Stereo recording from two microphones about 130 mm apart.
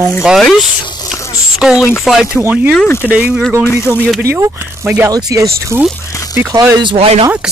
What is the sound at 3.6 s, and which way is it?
Speech, 20° left (ahead or behind).